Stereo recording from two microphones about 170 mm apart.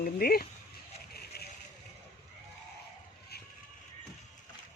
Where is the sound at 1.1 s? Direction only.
70° left (ahead or behind).